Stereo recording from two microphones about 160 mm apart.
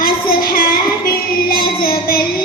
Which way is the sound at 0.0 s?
65° left (ahead or behind).